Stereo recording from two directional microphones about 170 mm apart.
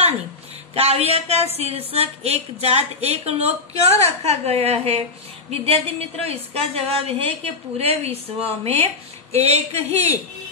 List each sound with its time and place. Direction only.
0.7 s a woman's voice: 35° right (ahead or behind)